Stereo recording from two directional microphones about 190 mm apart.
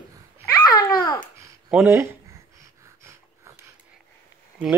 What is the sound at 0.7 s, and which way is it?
Babbling, 20° left (ahead or behind).